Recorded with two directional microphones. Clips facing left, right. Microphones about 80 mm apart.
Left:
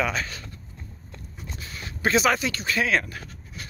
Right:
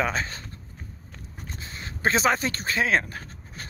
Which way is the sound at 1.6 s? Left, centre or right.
Right.